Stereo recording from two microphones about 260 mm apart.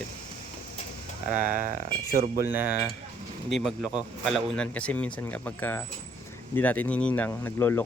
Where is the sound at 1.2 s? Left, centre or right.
Right.